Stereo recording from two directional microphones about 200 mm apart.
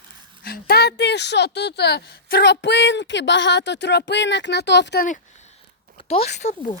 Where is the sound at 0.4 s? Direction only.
50° left (ahead or behind).